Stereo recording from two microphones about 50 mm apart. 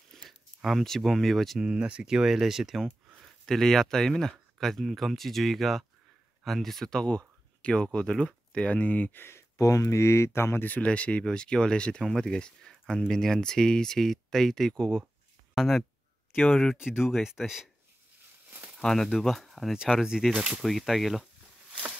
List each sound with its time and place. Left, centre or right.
0.1 s a sound: centre
0.6 s speech: centre
1.6 s speech: right
3.4 s speech: centre
8.6 s speech: left
9.1 s speech: left
9.6 s speech: left
10.7 s speech: left
12.0 s speech: centre
15.5 s speech: centre
18.8 s speech: centre
19.8 s speech: centre
20.6 s speech: centre